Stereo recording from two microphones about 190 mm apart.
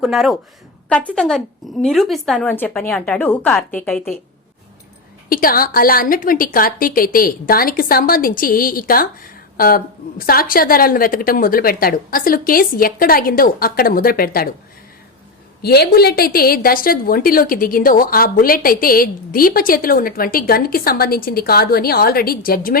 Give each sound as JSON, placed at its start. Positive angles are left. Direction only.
{"t": 0.0, "sound": "speech", "side_deg": 0}
{"t": 5.3, "sound": "a woman's voice", "side_deg": 50}
{"t": 15.6, "sound": "a woman's voice", "side_deg": 55}